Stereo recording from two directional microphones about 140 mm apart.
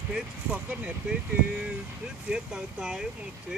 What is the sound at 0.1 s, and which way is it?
Speech, 10° right (ahead or behind).